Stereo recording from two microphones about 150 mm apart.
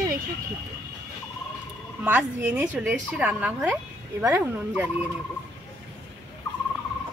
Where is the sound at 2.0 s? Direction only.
10° right (ahead or behind).